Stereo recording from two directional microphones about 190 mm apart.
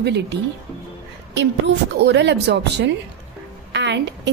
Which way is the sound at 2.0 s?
65° right (ahead or behind).